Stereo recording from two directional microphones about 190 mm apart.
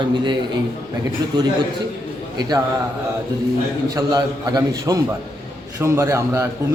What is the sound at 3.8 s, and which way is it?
A man's voice, 20° right (ahead or behind).